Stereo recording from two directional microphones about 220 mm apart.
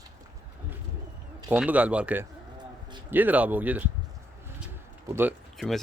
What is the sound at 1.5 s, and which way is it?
Speech, 5° right (ahead or behind).